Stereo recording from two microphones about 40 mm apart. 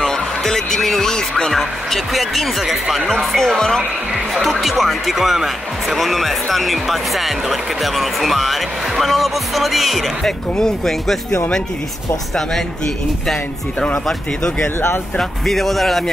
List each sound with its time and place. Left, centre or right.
0.0 s music: centre
0.8 s speech: centre
10.2 s speech: centre
15.1 s speech: centre